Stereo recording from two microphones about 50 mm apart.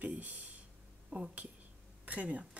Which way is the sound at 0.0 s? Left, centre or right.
Right.